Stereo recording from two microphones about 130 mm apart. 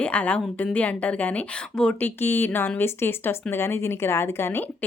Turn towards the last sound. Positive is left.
turn(degrees=20)  # may be behind; listen again after turning